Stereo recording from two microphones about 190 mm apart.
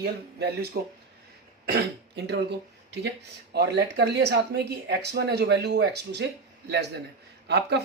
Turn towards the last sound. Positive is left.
turn(degrees=-60)  # may be behind; listen again after turning